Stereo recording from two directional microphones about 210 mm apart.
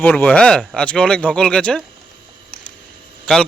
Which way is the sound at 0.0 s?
5° left (ahead or behind).